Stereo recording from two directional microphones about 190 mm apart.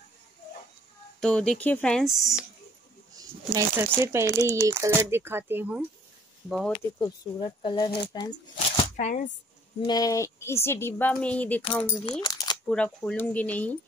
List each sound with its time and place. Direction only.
1.2 s speech: 5° left (ahead or behind)
3.2 s speech: 15° right (ahead or behind)
6.5 s speech: 5° left (ahead or behind)
7.0 s speech: 20° left (ahead or behind)
8.5 s shuffling cards: 35° left (ahead or behind)
9.8 s a woman's voice: 20° left (ahead or behind)
11.8 s speech: 25° left (ahead or behind)
12.6 s a woman's voice: 5° left (ahead or behind)